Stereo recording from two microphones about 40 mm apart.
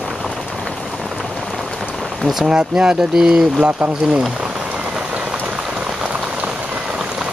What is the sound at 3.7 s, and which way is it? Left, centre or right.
Speech, right.